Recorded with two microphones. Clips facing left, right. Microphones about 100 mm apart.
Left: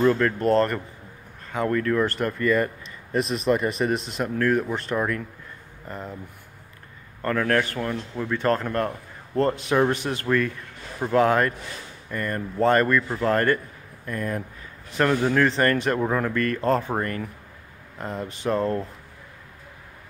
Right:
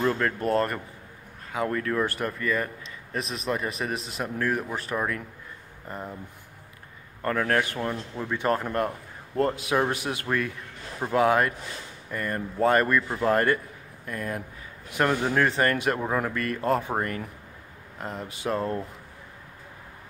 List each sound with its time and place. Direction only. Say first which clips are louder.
0.0 s speech: left 5 dB; 10° right (ahead or behind)
5.9 s speech: left 1 dB; 15° right (ahead or behind)
7.2 s speech: left 2 dB; 10° right (ahead or behind)